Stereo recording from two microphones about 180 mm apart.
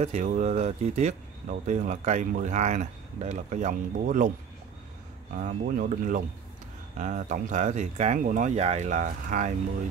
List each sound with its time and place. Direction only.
0.0 s speech: 40° right (ahead or behind)
5.3 s speech: 50° right (ahead or behind)